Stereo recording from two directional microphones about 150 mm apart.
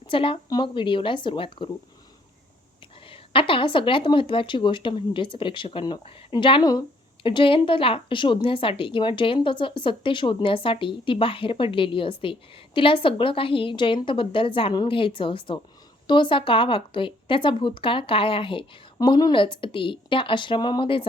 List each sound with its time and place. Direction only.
0.1 s speech: 35° left (ahead or behind)
3.1 s speech: 35° left (ahead or behind)